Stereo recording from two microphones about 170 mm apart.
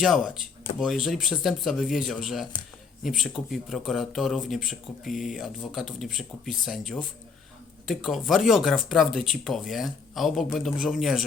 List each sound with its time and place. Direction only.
0.0 s speech: centre (ahead or behind)
5.1 s speech: 50° left (ahead or behind)
5.4 s speech: centre (ahead or behind)